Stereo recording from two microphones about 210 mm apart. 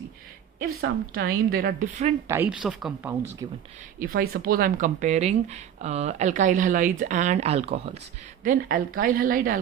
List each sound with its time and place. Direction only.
0.8 s speech: 45° right (ahead or behind)
2.2 s speech: 10° right (ahead or behind)
3.4 s speech: 20° right (ahead or behind)
4.0 s speech: 45° right (ahead or behind)
8.4 s speech: 40° right (ahead or behind)